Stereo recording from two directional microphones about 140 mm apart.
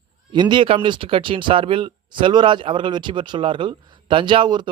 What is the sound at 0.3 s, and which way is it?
Speech, 35° right (ahead or behind).